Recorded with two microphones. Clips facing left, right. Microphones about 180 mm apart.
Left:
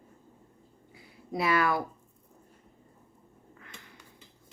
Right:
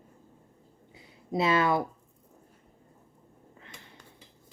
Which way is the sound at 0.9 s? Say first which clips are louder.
Right 4 dB; 20° right (ahead or behind).